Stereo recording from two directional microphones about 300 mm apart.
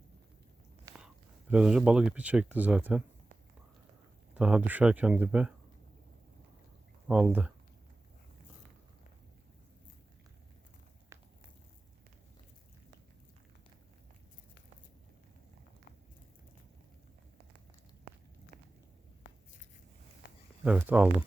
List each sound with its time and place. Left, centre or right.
0.9 s speech: centre
4.4 s speech: centre
7.1 s speech: centre
11.1 s walk: centre
20.2 s a sound: left
20.7 s speech: centre